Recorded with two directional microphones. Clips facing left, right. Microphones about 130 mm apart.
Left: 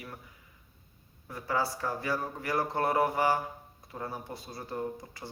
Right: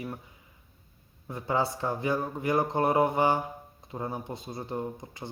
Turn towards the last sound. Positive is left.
turn(degrees=-20)  # may be behind; listen again after turning